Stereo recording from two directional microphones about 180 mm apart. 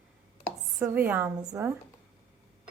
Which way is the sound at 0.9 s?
10° right (ahead or behind).